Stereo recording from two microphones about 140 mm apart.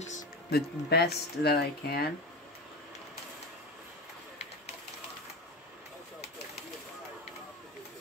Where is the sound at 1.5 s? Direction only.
90° left.